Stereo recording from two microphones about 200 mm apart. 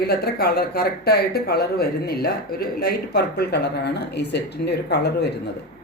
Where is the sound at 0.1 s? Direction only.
50° left (ahead or behind).